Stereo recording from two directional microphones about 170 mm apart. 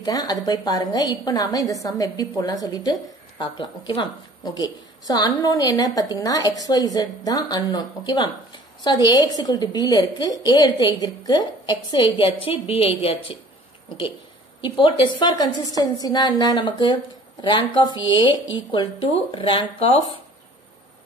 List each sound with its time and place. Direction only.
0.0 s a woman's voice: 20° left (ahead or behind)
14.6 s a woman's voice: 30° left (ahead or behind)